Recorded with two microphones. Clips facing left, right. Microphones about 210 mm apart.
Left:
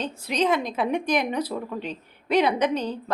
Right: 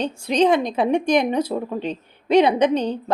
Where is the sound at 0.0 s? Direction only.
30° right (ahead or behind).